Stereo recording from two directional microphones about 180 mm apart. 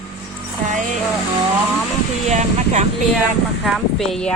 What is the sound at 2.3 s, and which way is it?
Speech, 40° right (ahead or behind).